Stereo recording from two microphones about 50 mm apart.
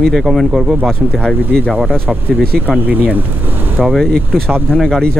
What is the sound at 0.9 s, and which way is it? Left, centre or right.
Speech, centre.